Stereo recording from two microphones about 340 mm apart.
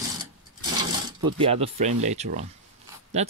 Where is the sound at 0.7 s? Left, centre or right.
Centre.